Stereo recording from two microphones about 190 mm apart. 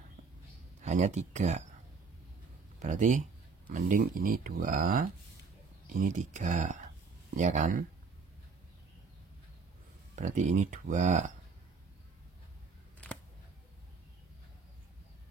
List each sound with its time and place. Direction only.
0.8 s speech: 40° right (ahead or behind)
2.8 s speech: 40° right (ahead or behind)
10.1 s speech: 40° right (ahead or behind)